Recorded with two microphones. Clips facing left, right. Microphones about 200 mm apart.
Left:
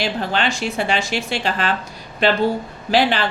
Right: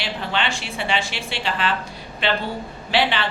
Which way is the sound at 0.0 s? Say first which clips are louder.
Left 4 dB; 40° left (ahead or behind).